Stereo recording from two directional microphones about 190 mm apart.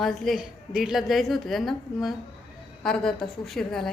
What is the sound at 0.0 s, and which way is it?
A woman's voice, centre (ahead or behind).